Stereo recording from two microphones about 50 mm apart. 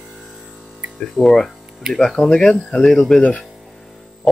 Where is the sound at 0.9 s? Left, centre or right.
Centre.